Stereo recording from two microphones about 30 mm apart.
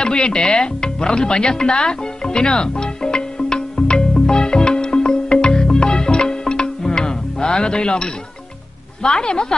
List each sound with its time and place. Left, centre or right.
0.0 s speech: left
3.8 s music: left
9.0 s a woman's voice: left